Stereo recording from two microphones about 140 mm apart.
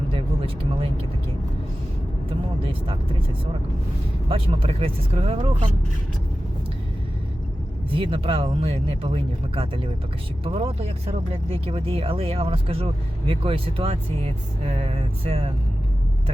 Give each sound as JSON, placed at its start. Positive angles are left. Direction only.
{"t": 0.1, "sound": "a sound", "side_deg": -40}
{"t": 2.6, "sound": "speech", "side_deg": -40}
{"t": 4.3, "sound": "speech", "side_deg": -40}
{"t": 7.9, "sound": "speech", "side_deg": -40}